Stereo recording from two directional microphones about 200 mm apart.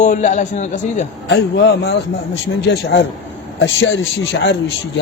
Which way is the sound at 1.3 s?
55° left (ahead or behind).